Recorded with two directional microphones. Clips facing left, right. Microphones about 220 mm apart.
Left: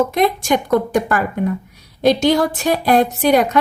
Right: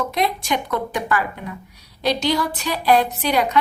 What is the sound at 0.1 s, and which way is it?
A woman's voice, 50° left (ahead or behind).